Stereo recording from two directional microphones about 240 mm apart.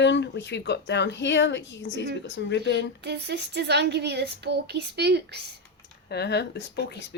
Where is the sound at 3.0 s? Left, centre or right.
Right.